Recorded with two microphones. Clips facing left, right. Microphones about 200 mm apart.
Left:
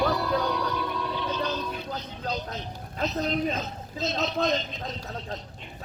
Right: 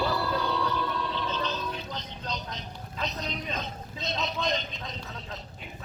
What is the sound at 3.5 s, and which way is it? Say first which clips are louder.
A man's voice: left 3 dB; 5° left (ahead or behind).